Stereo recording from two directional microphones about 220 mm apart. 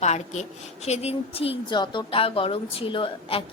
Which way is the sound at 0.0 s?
30° left (ahead or behind).